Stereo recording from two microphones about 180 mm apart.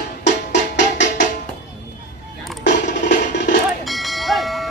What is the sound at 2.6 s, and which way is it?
Music, 75° left (ahead or behind).